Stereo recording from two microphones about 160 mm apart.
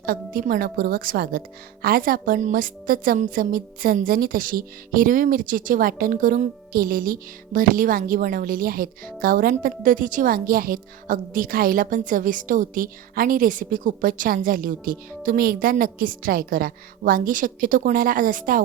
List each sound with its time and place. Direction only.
0.0 s a woman's voice: 60° right (ahead or behind)